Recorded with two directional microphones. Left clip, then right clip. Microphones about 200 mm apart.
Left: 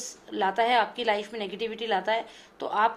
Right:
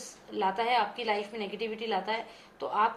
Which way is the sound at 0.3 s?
45° left (ahead or behind).